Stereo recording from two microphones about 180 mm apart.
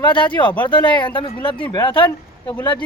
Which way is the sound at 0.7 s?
25° left (ahead or behind).